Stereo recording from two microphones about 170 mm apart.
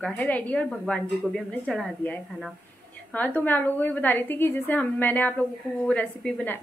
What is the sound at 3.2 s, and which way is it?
Speech, 10° left (ahead or behind).